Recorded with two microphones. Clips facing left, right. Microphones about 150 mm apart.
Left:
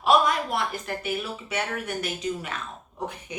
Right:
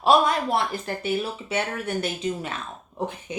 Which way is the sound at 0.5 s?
30° right (ahead or behind).